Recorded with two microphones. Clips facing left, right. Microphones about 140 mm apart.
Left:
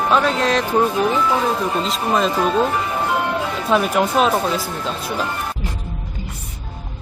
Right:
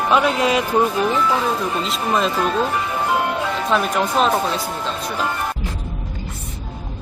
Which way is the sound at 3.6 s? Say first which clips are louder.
Left 3 dB; 5° left (ahead or behind).